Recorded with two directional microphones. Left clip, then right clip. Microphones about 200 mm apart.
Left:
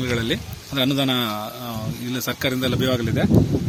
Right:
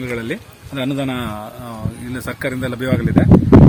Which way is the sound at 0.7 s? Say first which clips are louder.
Left 1 dB; 15° right (ahead or behind).